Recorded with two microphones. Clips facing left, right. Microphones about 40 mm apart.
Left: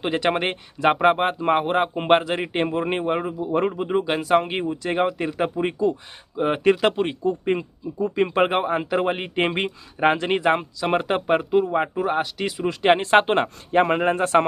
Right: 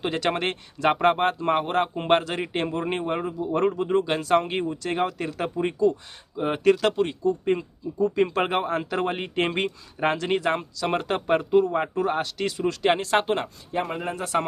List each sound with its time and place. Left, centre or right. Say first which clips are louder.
0.0 s speech: left 3 dB; centre
12.8 s speech: left 6 dB; left
13.7 s speech: left 10 dB; left
14.0 s speech: left 8 dB; left